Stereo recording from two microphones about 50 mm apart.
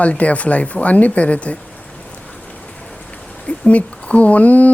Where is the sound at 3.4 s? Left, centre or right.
Left.